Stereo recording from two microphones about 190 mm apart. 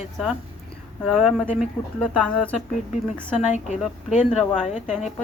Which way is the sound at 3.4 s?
40° left (ahead or behind).